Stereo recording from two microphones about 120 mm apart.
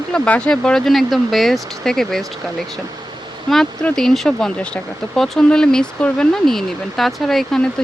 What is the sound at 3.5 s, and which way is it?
Speech, 5° left (ahead or behind).